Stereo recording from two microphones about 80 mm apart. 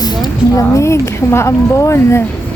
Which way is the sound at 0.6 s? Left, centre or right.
Left.